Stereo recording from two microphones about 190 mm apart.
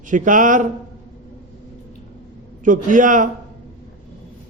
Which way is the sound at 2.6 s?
45° right (ahead or behind).